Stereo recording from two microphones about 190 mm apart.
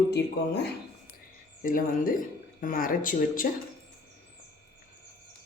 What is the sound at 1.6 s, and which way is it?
Speech, 45° left (ahead or behind).